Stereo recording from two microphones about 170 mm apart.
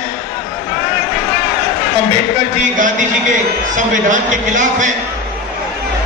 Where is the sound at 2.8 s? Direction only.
50° right (ahead or behind).